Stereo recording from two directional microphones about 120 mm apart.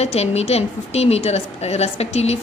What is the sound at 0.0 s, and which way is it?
A woman's voice, 65° left (ahead or behind).